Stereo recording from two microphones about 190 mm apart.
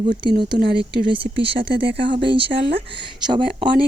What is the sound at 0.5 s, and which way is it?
Frog, 55° right (ahead or behind).